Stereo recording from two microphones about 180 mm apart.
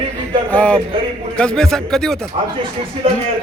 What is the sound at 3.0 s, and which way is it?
Speech, 30° right (ahead or behind).